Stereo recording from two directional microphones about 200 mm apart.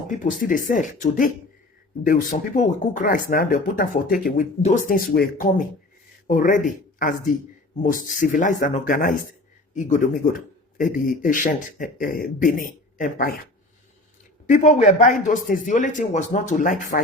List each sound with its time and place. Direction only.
0.1 s a man's voice: 40° left (ahead or behind)
14.5 s a man's voice: 40° left (ahead or behind)